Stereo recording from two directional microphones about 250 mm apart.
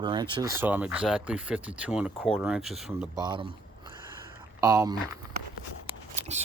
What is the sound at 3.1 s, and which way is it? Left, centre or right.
Speech, centre.